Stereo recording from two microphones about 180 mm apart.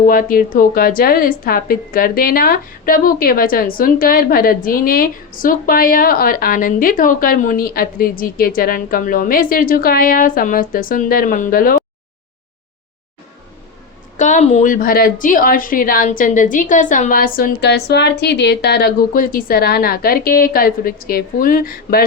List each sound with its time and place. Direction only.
0.0 s a woman's voice: 50° left (ahead or behind)
14.2 s a woman's voice: 40° left (ahead or behind)